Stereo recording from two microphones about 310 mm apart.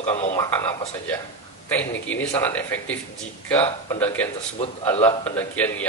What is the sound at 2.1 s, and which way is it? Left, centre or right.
A man's voice, centre.